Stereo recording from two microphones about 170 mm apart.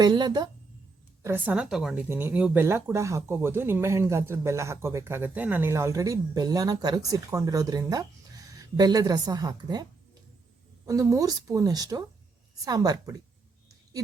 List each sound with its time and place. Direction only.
0.0 s speech: 25° right (ahead or behind)
1.2 s a woman's voice: 10° right (ahead or behind)
10.8 s speech: 20° right (ahead or behind)